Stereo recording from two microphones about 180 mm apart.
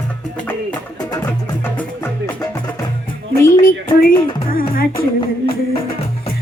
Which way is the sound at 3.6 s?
50° left (ahead or behind).